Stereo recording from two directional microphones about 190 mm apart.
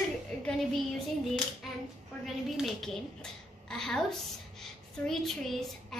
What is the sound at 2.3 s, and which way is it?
A woman's voice, centre (ahead or behind).